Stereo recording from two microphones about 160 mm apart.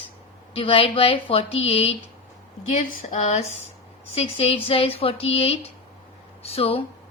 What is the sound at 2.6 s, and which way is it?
Speech, 50° left (ahead or behind).